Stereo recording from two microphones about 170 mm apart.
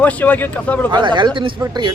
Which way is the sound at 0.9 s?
25° right (ahead or behind).